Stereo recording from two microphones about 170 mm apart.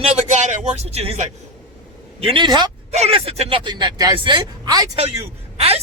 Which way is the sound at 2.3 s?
25° right (ahead or behind).